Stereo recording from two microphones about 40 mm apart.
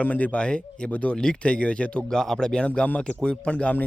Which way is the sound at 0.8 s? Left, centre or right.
Left.